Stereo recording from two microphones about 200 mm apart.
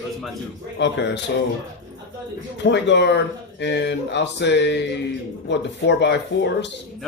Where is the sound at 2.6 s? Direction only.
60° left (ahead or behind).